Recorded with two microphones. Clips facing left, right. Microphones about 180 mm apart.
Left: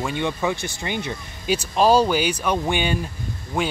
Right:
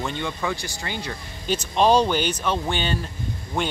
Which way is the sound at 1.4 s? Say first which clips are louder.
Left 1 dB; 10° left (ahead or behind).